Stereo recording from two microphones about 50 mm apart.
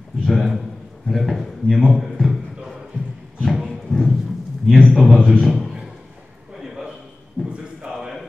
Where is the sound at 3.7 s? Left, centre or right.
Centre.